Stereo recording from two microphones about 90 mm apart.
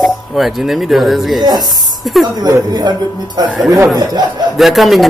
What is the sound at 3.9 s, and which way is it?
Speech, 50° right (ahead or behind).